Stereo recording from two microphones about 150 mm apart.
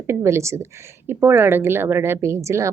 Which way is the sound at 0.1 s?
20° right (ahead or behind).